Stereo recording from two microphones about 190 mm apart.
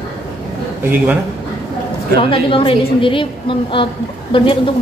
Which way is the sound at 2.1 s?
30° left (ahead or behind).